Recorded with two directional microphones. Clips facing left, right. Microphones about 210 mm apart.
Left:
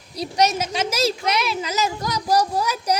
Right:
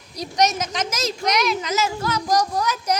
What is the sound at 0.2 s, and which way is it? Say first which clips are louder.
A woman's voice: left 1 dB; 30° left (ahead or behind).